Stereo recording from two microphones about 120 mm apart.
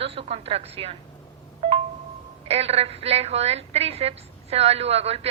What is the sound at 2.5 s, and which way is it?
A woman's voice, 55° right (ahead or behind).